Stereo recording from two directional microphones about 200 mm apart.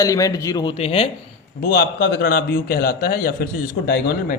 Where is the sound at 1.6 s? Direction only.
45° left (ahead or behind).